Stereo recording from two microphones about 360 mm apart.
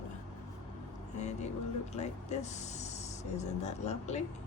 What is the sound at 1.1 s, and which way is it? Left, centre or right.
Speech, centre.